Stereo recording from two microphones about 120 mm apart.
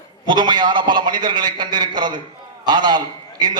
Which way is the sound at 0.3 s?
40° right (ahead or behind).